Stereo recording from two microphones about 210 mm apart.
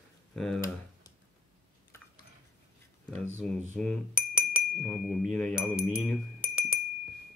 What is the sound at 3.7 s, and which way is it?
Speech, 5° left (ahead or behind).